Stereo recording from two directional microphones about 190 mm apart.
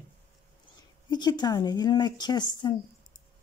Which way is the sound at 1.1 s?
25° left (ahead or behind).